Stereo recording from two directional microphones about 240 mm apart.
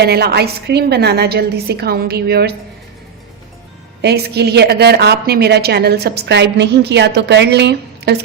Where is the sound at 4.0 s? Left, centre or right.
Right.